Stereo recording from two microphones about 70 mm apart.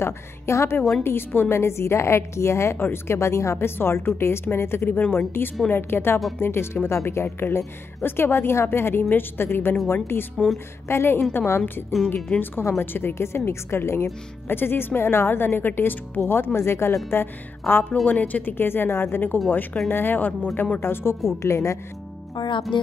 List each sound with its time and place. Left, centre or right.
0.0 s a woman's voice: left
22.3 s speech: left